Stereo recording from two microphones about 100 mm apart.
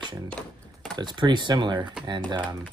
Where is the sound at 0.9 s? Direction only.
50° right (ahead or behind).